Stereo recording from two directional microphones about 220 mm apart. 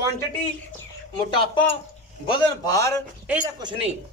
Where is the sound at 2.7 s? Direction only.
15° left (ahead or behind).